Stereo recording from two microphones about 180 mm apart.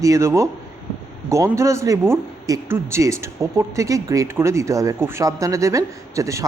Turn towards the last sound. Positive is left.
turn(degrees=-15)  # may be behind; listen again after turning